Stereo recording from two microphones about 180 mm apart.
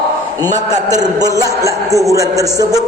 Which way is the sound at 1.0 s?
20° right (ahead or behind).